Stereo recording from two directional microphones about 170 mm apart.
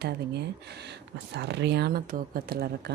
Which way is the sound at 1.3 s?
90° right.